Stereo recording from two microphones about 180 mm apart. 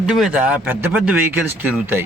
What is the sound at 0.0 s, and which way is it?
Speech, 5° right (ahead or behind).